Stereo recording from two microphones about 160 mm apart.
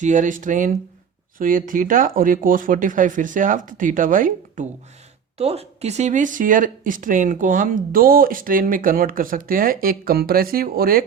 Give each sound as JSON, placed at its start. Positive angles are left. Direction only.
{"t": 0.0, "sound": "speech", "side_deg": -50}
{"t": 5.4, "sound": "speech", "side_deg": -40}